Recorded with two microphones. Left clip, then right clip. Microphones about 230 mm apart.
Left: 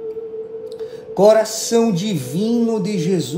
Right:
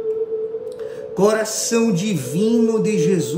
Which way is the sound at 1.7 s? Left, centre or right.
Centre.